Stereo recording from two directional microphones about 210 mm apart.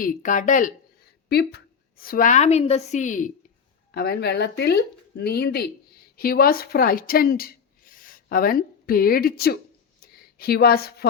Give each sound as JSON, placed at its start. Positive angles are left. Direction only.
{"t": 0.0, "sound": "a woman's voice", "side_deg": 35}
{"t": 1.3, "sound": "a woman's voice", "side_deg": 50}
{"t": 3.9, "sound": "speech", "side_deg": 50}
{"t": 10.0, "sound": "a sound", "side_deg": 45}
{"t": 10.3, "sound": "speech", "side_deg": 45}